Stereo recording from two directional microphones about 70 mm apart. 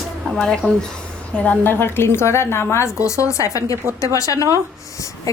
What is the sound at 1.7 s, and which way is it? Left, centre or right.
A woman's voice, left.